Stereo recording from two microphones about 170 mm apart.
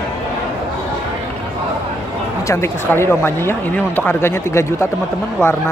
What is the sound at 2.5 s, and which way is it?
Speech, 15° left (ahead or behind).